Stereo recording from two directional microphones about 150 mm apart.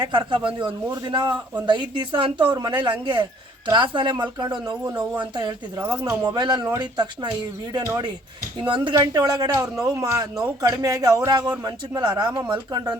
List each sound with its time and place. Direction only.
0.0 s a man's voice: 30° right (ahead or behind)
5.8 s speech: 20° right (ahead or behind)
8.6 s a man's voice: 30° right (ahead or behind)